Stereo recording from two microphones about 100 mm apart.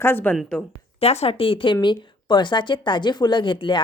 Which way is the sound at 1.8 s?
50° left (ahead or behind).